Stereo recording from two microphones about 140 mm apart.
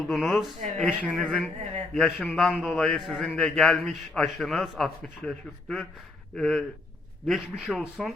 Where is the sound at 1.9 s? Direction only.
Centre (ahead or behind).